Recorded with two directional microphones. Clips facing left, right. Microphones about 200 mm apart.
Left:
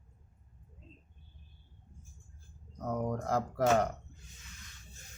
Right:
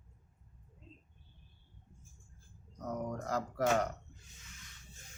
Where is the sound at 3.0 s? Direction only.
55° left (ahead or behind).